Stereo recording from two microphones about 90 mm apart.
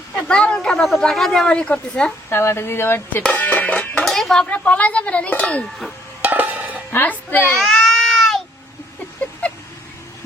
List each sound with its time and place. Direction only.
0.3 s a woman's voice: 10° left (ahead or behind)
2.3 s speech: 30° left (ahead or behind)
3.3 s music: 20° left (ahead or behind)
4.0 s a woman's voice: 5° left (ahead or behind)
6.2 s a sound: 20° right (ahead or behind)
6.9 s speech: 20° left (ahead or behind)
7.6 s baby cry: centre (ahead or behind)